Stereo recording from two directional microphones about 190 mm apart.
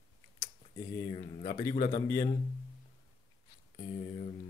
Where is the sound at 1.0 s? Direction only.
25° left (ahead or behind).